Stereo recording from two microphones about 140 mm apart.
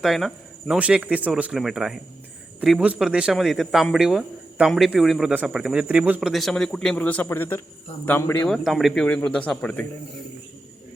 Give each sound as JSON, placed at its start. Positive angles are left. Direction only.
{"t": 0.0, "sound": "speech", "side_deg": 0}
{"t": 8.4, "sound": "speech", "side_deg": 0}